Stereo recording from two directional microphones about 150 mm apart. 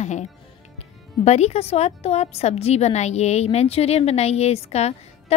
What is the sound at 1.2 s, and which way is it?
A woman's voice, 45° left (ahead or behind).